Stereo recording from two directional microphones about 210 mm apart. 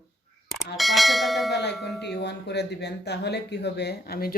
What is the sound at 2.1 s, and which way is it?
Speech, 55° left (ahead or behind).